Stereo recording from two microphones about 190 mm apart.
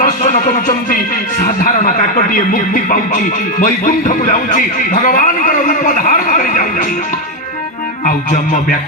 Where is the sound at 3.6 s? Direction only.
45° left (ahead or behind).